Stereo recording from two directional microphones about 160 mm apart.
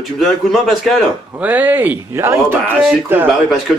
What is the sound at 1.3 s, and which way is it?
Speech, 10° right (ahead or behind).